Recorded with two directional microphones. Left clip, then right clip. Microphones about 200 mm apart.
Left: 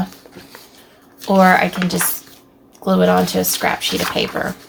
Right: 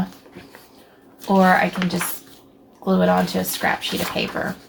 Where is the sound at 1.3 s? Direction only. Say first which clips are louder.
Left 4 dB; 45° left (ahead or behind).